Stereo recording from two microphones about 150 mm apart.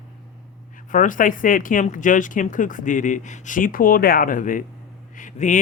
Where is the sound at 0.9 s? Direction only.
60° left (ahead or behind).